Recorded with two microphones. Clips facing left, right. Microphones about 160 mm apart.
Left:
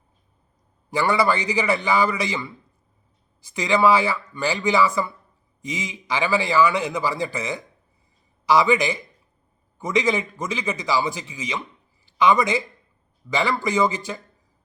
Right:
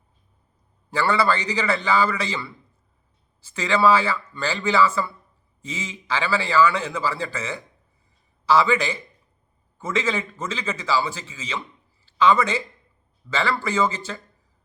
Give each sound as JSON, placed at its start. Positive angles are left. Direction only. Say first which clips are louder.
{"t": 0.9, "sound": "a man's voice", "louder": "left 1 dB", "side_deg": 15}